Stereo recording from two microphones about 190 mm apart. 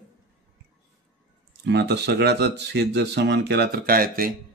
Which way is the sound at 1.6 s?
60° right (ahead or behind).